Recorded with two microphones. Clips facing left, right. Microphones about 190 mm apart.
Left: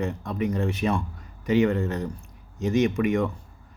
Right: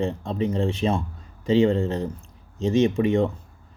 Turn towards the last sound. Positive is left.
turn(degrees=-25)  # may be behind; listen again after turning